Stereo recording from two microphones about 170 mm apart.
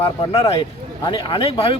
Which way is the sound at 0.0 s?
35° left (ahead or behind).